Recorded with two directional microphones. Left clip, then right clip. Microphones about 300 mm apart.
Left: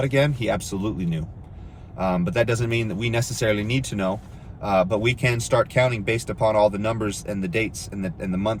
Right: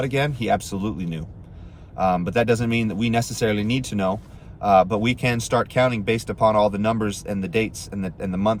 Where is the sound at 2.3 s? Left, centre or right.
Centre.